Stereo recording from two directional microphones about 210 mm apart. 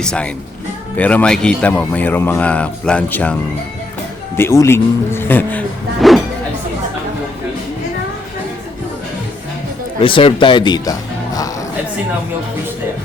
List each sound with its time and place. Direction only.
0.0 s a man's voice: 5° left (ahead or behind)
4.4 s speech: 10° left (ahead or behind)
10.0 s speech: 25° left (ahead or behind)